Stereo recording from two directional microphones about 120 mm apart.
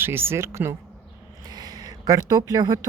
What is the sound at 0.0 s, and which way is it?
Speech, 20° right (ahead or behind).